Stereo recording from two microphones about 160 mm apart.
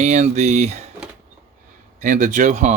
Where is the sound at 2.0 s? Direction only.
50° right (ahead or behind).